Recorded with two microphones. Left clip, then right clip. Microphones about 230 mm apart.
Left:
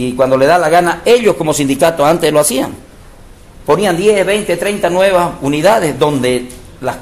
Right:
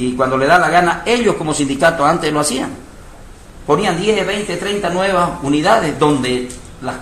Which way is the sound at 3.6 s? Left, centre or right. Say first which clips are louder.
Left 4 dB; left.